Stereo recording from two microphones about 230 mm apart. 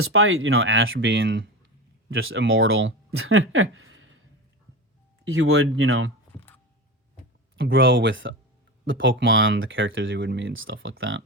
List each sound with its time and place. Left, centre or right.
0.0 s speech: right
5.3 s speech: right
7.5 s speech: right